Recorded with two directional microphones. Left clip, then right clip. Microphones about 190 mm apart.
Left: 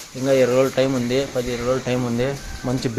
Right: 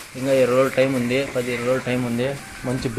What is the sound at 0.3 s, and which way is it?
Speech, 15° left (ahead or behind).